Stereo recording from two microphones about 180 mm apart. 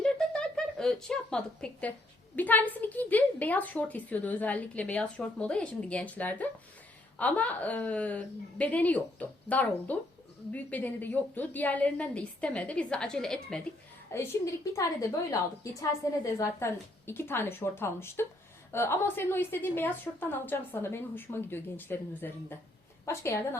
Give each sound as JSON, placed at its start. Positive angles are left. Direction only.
{"t": 0.0, "sound": "a sound", "side_deg": 5}
{"t": 2.3, "sound": "a woman's voice", "side_deg": 10}
{"t": 14.1, "sound": "a woman's voice", "side_deg": 15}
{"t": 16.4, "sound": "a woman's voice", "side_deg": 15}